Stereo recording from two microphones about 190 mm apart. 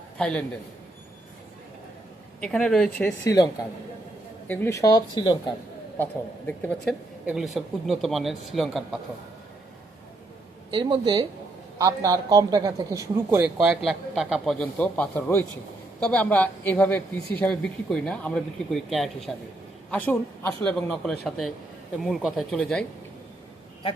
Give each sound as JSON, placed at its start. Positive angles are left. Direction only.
{"t": 0.2, "sound": "a man's voice", "side_deg": 5}
{"t": 2.4, "sound": "a man's voice", "side_deg": 5}
{"t": 3.2, "sound": "speech", "side_deg": 20}
{"t": 6.6, "sound": "a woman's voice", "side_deg": 5}
{"t": 10.7, "sound": "a man's voice", "side_deg": -25}
{"t": 13.4, "sound": "a man's voice", "side_deg": -5}
{"t": 17.2, "sound": "speech", "side_deg": 55}
{"t": 17.4, "sound": "a man's voice", "side_deg": 5}